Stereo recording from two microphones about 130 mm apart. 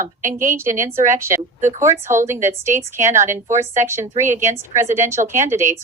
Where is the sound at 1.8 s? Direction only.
20° right (ahead or behind).